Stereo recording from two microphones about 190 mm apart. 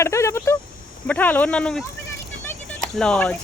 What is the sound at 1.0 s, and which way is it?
Speech, 10° left (ahead or behind).